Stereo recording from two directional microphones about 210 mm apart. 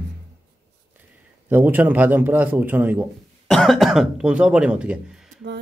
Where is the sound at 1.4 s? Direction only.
10° right (ahead or behind).